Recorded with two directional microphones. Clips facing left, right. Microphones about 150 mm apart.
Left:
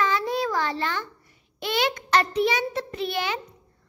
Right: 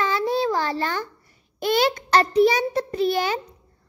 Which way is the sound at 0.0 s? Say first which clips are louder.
Right 2 dB; 30° right (ahead or behind).